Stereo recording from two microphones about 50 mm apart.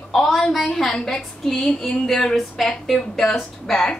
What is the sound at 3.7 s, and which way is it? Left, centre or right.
Speech, centre.